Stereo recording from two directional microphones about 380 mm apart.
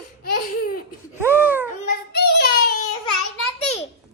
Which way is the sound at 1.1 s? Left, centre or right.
Centre.